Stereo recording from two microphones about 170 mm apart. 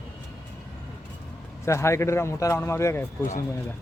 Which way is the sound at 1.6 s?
15° left (ahead or behind).